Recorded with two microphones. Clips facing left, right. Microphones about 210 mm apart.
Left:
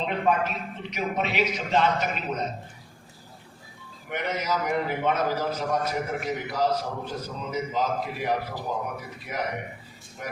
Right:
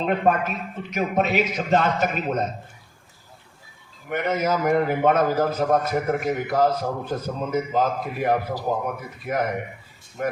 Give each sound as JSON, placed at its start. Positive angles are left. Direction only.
{"t": 0.0, "sound": "a man's voice", "side_deg": -50}
{"t": 4.1, "sound": "a man's voice", "side_deg": -50}